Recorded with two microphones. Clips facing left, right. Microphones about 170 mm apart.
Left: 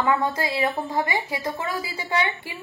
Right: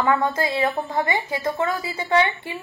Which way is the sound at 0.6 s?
15° left (ahead or behind).